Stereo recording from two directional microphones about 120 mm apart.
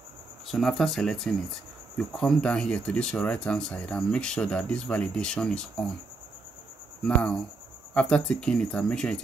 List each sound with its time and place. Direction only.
0.5 s speech: centre (ahead or behind)
7.0 s speech: 10° left (ahead or behind)